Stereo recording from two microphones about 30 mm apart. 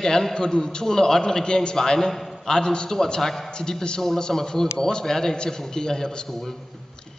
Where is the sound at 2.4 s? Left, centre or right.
Left.